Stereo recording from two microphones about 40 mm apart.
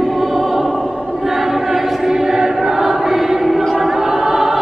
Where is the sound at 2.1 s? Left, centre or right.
Centre.